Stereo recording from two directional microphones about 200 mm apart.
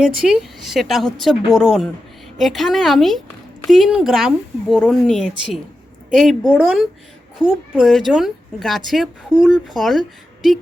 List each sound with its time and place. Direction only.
0.0 s a woman's voice: 5° right (ahead or behind)